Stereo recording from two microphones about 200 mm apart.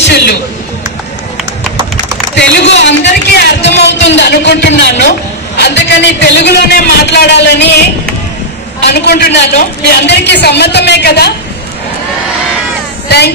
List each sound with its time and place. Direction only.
0.0 s music: 55° left (ahead or behind)
2.5 s a man's voice: 65° left (ahead or behind)
8.8 s a man's voice: 55° left (ahead or behind)
13.1 s a man's voice: 55° left (ahead or behind)